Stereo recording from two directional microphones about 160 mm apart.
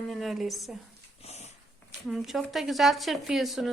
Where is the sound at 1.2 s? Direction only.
40° left (ahead or behind).